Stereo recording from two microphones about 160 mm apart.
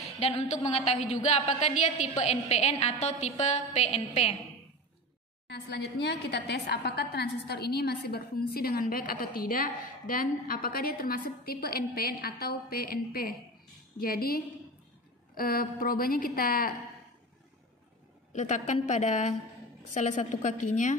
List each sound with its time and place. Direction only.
0.0 s a woman's voice: 40° left (ahead or behind)
5.5 s a woman's voice: 90° left; by 16.7 s 65° left (ahead or behind)
18.3 s a woman's voice: 50° left (ahead or behind)